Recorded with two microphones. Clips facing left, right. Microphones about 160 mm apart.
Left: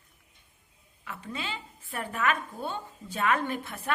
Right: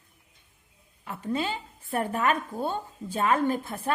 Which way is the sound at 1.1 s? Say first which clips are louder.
Right 8 dB; 40° right (ahead or behind).